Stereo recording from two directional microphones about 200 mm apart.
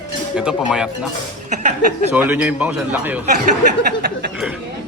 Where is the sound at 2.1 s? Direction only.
10° right (ahead or behind).